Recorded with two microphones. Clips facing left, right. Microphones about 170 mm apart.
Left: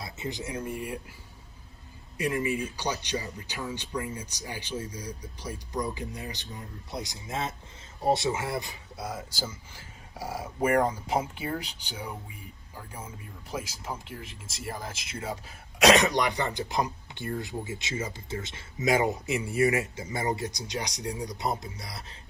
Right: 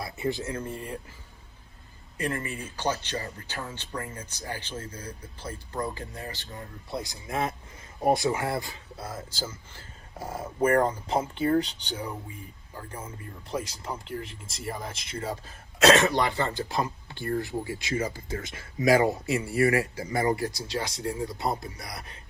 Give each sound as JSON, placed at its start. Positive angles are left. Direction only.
{"t": 0.0, "sound": "speech", "side_deg": 20}
{"t": 2.1, "sound": "speech", "side_deg": 10}